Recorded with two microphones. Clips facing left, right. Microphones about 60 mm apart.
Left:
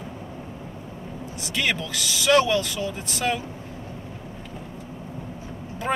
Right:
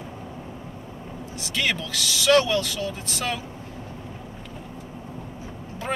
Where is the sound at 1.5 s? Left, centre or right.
Centre.